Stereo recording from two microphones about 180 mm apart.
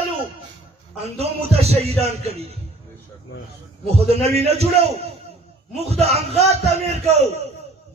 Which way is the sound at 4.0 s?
35° right (ahead or behind).